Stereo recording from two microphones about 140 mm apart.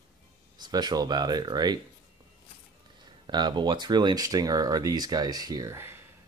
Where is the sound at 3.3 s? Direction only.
30° right (ahead or behind).